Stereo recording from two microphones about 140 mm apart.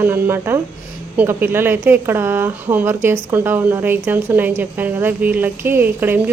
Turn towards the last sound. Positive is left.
turn(degrees=-15)  # may be behind; listen again after turning